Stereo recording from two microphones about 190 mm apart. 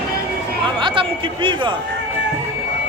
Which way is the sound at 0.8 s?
25° right (ahead or behind).